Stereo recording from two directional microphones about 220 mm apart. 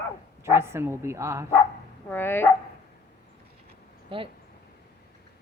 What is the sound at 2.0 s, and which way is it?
Speech, 10° left (ahead or behind).